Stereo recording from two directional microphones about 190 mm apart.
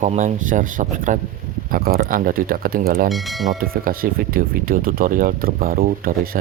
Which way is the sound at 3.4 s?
50° right (ahead or behind).